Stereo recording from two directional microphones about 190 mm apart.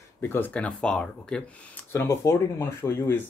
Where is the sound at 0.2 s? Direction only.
10° left (ahead or behind).